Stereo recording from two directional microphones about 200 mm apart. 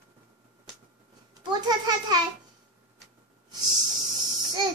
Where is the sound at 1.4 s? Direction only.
20° right (ahead or behind).